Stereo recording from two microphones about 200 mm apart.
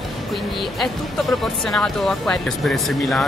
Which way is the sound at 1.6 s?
5° left (ahead or behind).